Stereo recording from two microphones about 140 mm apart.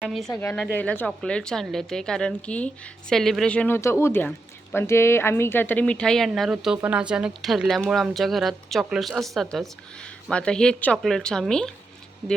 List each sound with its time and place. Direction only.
0.0 s speech: centre (ahead or behind)
0.8 s speech: 10° left (ahead or behind)
3.8 s speech: 20° left (ahead or behind); by 11.7 s 5° left (ahead or behind)